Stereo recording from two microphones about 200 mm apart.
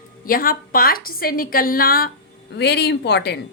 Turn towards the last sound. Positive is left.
turn(degrees=55)  # may be behind; listen again after turning